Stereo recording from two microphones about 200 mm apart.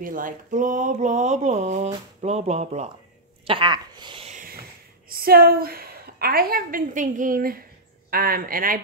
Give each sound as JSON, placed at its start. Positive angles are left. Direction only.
{"t": 0.0, "sound": "speech", "side_deg": -40}
{"t": 3.4, "sound": "a sound", "side_deg": -25}
{"t": 5.1, "sound": "a woman's voice", "side_deg": -50}